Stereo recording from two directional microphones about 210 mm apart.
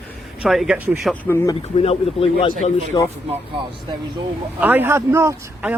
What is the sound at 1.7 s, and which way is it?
Speech, 30° left (ahead or behind).